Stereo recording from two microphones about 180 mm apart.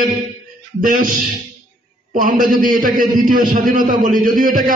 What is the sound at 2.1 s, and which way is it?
A man's voice, 50° right (ahead or behind).